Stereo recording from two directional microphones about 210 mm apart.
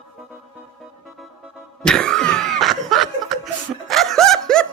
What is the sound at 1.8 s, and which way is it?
Cough, 5° left (ahead or behind).